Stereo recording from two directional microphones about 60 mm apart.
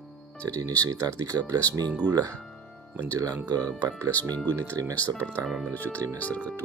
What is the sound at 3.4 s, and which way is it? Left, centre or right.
Speech, right.